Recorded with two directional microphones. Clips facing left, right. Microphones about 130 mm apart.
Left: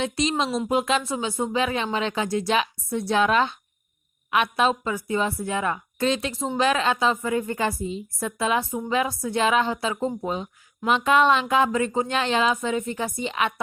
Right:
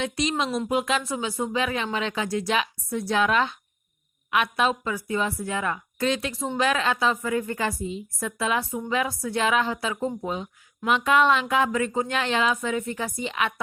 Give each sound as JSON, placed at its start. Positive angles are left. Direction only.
{"t": 0.0, "sound": "speech", "side_deg": 30}